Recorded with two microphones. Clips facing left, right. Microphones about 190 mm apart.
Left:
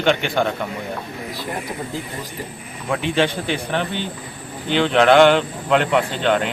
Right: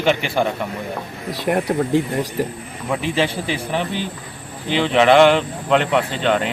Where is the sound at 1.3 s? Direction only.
75° right (ahead or behind).